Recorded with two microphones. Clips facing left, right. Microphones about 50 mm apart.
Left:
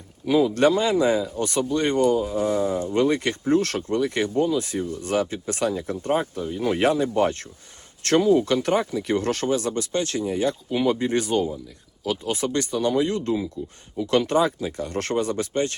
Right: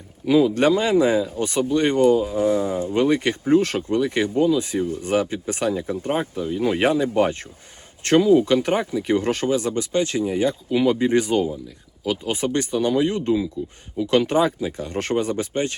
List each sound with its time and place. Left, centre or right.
0.5 s speech: right
13.6 s speech: right
14.1 s speech: right